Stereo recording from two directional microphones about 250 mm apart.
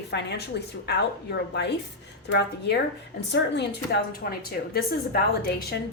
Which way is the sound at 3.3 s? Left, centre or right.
Left.